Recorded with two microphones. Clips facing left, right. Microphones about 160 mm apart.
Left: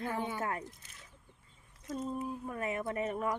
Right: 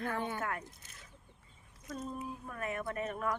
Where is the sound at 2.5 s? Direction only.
20° left (ahead or behind).